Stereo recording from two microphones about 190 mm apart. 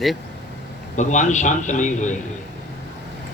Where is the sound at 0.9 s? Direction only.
40° left (ahead or behind).